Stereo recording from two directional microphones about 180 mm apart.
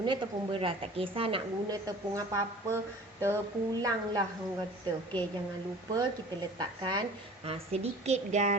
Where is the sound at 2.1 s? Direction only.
20° right (ahead or behind).